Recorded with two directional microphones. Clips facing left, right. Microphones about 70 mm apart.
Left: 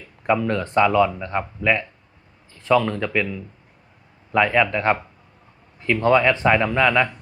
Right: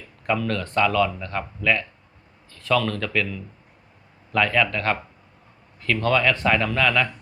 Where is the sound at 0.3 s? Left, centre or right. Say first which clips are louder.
Left 4 dB; left.